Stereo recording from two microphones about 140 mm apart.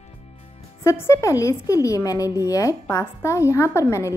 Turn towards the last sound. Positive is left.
turn(degrees=20)  # may be behind; listen again after turning